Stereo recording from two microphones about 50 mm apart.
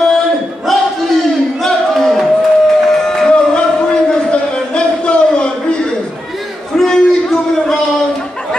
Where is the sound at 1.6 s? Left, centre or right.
Centre.